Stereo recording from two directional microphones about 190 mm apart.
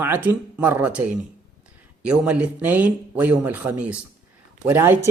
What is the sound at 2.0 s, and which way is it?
Speech, 5° right (ahead or behind).